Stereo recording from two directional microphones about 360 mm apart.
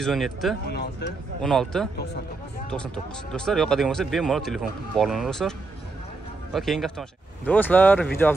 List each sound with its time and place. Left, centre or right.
0.0 s speech: centre
0.7 s speech: left
1.4 s speech: centre
6.5 s speech: centre